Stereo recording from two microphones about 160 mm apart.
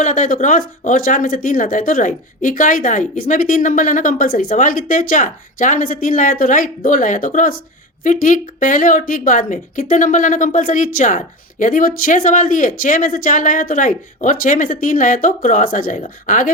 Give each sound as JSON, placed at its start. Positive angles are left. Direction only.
{"t": 0.0, "sound": "a woman's voice", "side_deg": 50}